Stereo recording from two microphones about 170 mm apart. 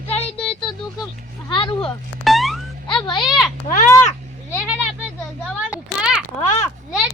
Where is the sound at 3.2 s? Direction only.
Centre (ahead or behind).